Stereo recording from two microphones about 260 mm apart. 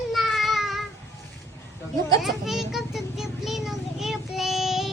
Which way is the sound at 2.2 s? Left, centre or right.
Centre.